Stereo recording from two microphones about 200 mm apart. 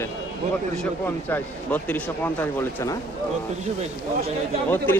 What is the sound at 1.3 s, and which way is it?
Speech, 10° left (ahead or behind).